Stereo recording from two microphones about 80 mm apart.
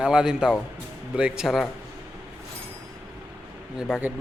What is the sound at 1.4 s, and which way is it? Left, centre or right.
Speech, centre.